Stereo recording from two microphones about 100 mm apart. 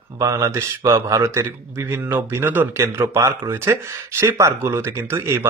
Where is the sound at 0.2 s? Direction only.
35° right (ahead or behind).